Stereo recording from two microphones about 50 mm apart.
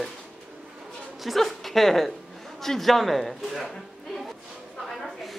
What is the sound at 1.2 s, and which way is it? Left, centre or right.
A woman's voice, centre.